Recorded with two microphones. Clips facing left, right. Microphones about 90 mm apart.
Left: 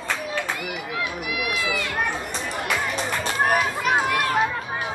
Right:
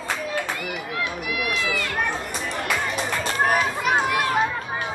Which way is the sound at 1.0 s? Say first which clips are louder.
Right 1 dB; 5° left (ahead or behind).